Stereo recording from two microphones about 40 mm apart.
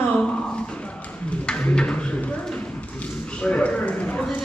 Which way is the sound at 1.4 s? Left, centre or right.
Left.